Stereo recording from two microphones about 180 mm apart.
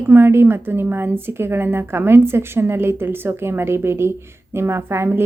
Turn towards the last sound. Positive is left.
turn(degrees=-15)  # may be behind; listen again after turning